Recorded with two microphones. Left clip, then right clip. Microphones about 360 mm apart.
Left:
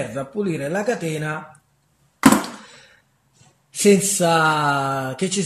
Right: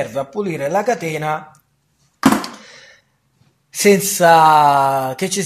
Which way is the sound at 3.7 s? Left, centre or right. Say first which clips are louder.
Right 3 dB; centre.